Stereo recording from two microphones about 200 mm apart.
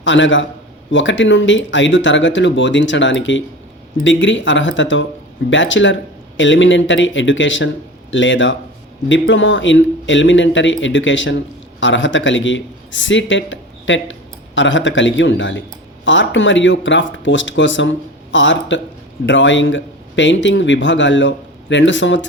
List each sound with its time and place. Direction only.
0.0 s a man's voice: 70° left (ahead or behind)